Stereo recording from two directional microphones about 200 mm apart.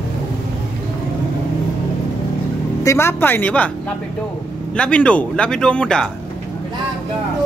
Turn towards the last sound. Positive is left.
turn(degrees=5)  # may be behind; listen again after turning